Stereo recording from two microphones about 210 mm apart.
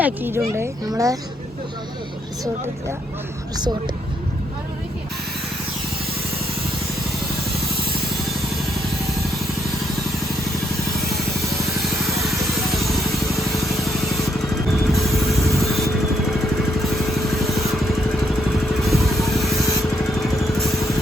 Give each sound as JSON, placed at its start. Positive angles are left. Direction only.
{"t": 0.0, "sound": "speech", "side_deg": -10}
{"t": 12.2, "sound": "vehicle", "side_deg": 0}
{"t": 18.8, "sound": "music", "side_deg": 0}
{"t": 19.3, "sound": "spray", "side_deg": 0}
{"t": 20.2, "sound": "vehicle", "side_deg": 0}